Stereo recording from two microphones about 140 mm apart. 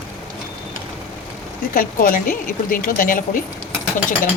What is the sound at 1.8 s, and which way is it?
A woman's voice, 80° left.